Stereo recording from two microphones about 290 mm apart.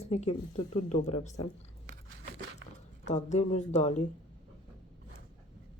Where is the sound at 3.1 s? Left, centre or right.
Left.